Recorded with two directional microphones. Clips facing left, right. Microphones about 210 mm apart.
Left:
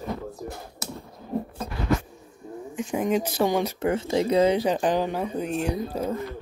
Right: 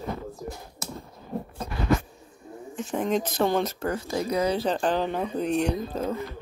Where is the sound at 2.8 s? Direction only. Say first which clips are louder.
Left 2 dB; 10° left (ahead or behind).